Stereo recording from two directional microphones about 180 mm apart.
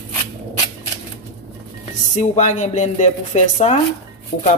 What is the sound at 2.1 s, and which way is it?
Speech, 40° left (ahead or behind).